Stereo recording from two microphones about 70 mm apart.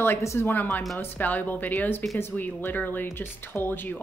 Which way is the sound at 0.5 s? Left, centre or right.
Left.